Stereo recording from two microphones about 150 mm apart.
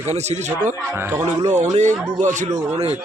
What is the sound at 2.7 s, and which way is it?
Speech, 45° right (ahead or behind).